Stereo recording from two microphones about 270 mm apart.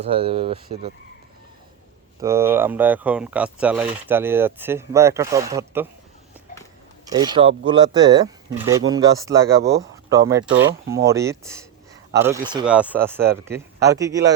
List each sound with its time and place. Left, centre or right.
0.1 s speech: right
2.2 s speech: centre
7.0 s speech: centre